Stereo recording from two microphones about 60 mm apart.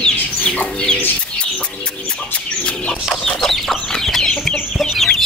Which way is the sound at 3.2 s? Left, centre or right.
Centre.